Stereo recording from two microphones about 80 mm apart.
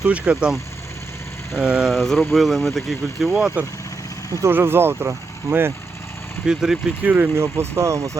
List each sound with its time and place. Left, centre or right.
0.1 s speech: centre
1.5 s speech: centre
3.6 s speech: centre
4.3 s speech: right
4.5 s speech: right
6.4 s speech: centre
7.0 s speech: right
7.3 s speech: right